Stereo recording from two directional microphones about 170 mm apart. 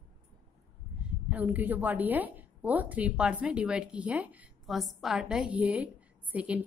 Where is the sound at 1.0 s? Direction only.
10° right (ahead or behind).